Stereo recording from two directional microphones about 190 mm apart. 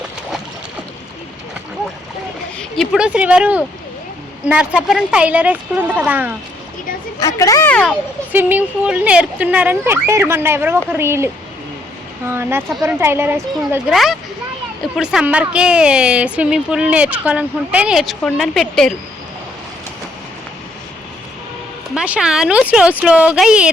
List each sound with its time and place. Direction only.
2.6 s speech: centre (ahead or behind)
7.2 s speech: 15° left (ahead or behind)
8.3 s speech: 10° right (ahead or behind)
12.3 s speech: 10° right (ahead or behind)
21.9 s speech: 5° right (ahead or behind)